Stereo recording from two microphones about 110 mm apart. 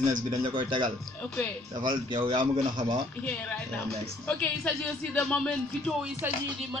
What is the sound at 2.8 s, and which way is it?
Speech, 60° right (ahead or behind).